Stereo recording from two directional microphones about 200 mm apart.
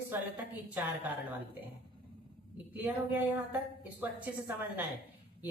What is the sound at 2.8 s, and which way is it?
A woman's voice, 10° right (ahead or behind).